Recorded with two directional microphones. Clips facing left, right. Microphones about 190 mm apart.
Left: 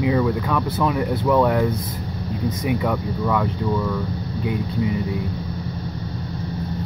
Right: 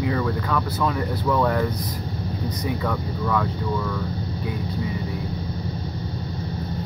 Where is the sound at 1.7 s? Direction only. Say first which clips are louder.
Left 3 dB; 25° left (ahead or behind).